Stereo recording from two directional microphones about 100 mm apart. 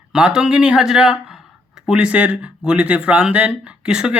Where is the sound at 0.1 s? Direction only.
5° right (ahead or behind).